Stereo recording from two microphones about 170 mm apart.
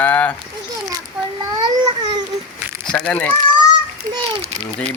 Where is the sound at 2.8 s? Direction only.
10° left (ahead or behind).